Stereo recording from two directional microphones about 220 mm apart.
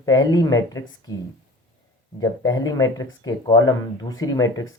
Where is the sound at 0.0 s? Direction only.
15° left (ahead or behind).